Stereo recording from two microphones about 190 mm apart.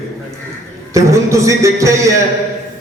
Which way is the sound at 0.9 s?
15° right (ahead or behind).